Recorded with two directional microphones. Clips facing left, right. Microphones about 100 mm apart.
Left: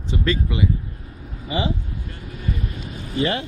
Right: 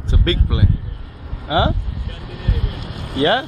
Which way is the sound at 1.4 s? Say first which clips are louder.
Right 6 dB; 65° right (ahead or behind).